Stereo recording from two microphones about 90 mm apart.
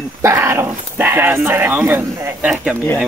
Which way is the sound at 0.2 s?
35° right (ahead or behind).